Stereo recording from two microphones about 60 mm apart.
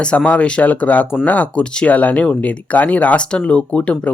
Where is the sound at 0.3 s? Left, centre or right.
Left.